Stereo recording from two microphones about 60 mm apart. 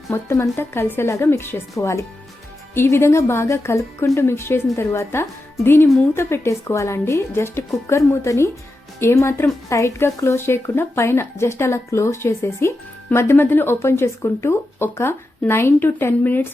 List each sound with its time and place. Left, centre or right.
0.1 s speech: left
1.7 s speech: left